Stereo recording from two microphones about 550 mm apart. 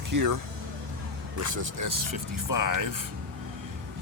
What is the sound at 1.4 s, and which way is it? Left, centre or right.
Speech, right.